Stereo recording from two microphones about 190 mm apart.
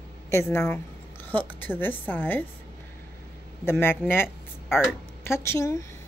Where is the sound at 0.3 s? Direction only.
15° left (ahead or behind).